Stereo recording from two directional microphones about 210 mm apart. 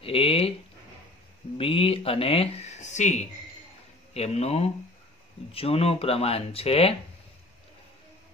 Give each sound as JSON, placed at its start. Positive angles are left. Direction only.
{"t": 0.0, "sound": "speech", "side_deg": 25}
{"t": 1.6, "sound": "speech", "side_deg": 25}